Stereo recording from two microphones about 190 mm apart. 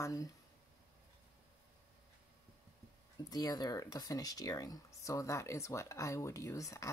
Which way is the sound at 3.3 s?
20° left (ahead or behind).